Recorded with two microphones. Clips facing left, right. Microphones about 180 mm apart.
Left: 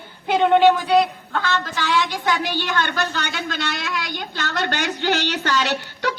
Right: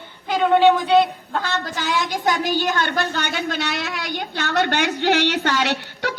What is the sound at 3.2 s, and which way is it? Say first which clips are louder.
Speech: right 2 dB; 60° right (ahead or behind).